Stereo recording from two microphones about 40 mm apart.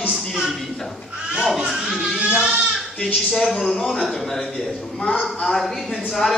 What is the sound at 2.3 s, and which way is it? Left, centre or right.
Speech, right.